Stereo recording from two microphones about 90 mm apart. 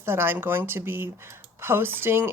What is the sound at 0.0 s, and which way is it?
Speech, 25° right (ahead or behind).